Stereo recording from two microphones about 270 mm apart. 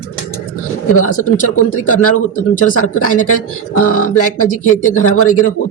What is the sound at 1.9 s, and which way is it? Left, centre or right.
Speech, left.